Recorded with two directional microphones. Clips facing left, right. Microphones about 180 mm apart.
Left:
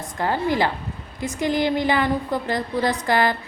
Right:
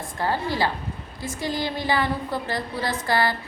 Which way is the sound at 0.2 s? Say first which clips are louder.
Left 3 dB; 20° left (ahead or behind).